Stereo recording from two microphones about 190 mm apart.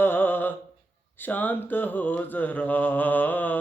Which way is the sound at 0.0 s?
10° left (ahead or behind).